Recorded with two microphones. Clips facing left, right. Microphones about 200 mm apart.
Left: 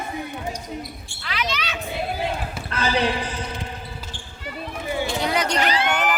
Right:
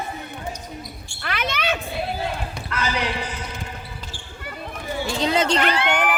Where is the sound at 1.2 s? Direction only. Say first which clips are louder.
Right 3 dB; 55° right (ahead or behind).